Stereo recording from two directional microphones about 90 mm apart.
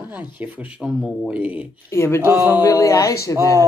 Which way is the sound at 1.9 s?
30° left (ahead or behind).